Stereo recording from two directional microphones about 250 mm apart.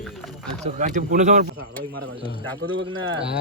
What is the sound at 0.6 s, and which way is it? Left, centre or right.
Speech, right.